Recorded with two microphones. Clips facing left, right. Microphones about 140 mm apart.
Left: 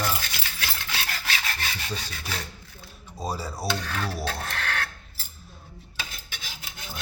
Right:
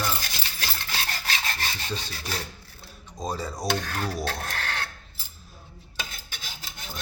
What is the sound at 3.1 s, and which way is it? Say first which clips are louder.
Speech: right 1 dB; 10° left (ahead or behind).